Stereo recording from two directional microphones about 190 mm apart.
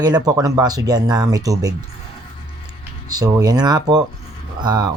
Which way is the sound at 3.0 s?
20° right (ahead or behind).